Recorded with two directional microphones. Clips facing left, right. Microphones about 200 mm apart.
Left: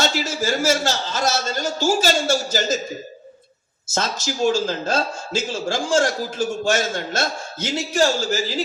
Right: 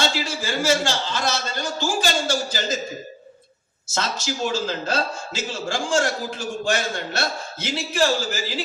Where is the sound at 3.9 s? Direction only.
45° left (ahead or behind).